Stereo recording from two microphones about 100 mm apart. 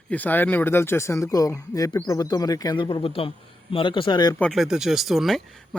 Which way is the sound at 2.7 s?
55° left (ahead or behind).